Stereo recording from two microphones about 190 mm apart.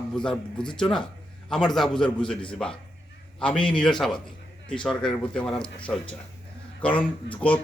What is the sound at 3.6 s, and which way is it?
Speech, 25° left (ahead or behind).